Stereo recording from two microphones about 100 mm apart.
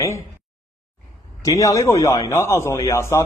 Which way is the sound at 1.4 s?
30° left (ahead or behind).